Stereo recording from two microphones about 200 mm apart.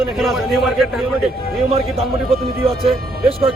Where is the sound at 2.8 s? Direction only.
30° right (ahead or behind).